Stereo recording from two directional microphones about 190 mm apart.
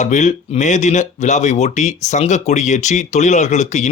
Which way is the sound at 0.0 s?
40° left (ahead or behind).